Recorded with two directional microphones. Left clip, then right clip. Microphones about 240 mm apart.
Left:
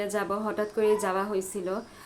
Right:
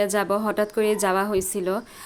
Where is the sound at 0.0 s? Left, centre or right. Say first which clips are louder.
Right 7 dB; right.